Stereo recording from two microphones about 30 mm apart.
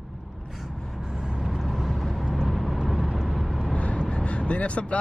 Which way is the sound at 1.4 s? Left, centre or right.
Centre.